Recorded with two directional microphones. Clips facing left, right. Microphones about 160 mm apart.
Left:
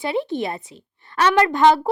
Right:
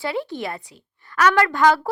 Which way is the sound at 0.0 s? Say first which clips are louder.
Left 3 dB; 20° left (ahead or behind).